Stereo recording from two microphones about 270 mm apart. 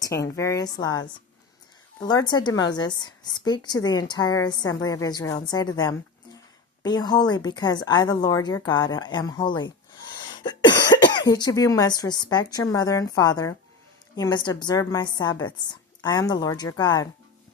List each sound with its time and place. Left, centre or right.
0.0 s a woman's voice: centre
10.2 s cough: centre
11.2 s a woman's voice: centre